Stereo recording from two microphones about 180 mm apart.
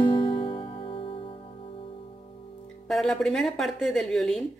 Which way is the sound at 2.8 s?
5° left (ahead or behind).